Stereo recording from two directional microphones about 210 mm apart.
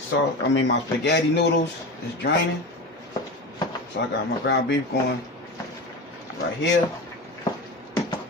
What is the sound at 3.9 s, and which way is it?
Speech, 55° left (ahead or behind).